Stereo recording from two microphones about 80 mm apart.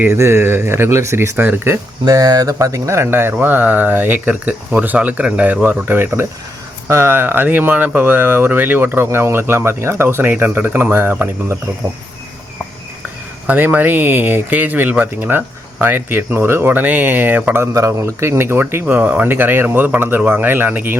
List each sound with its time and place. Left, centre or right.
0.0 s speech: right
1.4 s speech: right
1.7 s speech: right
13.5 s speech: right
17.7 s speech: right